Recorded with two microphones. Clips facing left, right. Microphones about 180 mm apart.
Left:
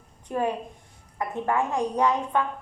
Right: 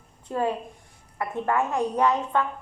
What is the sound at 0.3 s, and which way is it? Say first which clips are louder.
A woman's voice: even; 15° left (ahead or behind).